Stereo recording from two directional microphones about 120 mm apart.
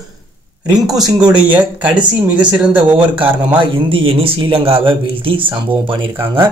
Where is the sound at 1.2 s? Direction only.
10° right (ahead or behind).